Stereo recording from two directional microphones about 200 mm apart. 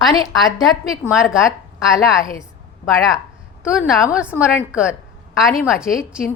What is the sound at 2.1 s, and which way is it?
Speech, 15° left (ahead or behind).